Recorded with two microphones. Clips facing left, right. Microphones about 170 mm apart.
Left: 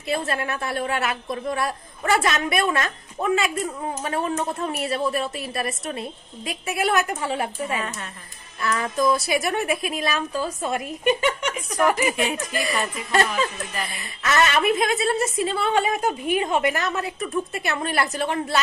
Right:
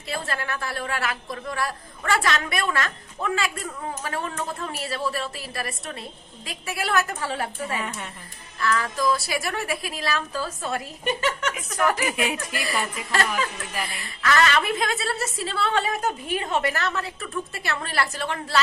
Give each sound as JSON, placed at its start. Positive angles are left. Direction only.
{"t": 0.1, "sound": "a woman's voice", "side_deg": 25}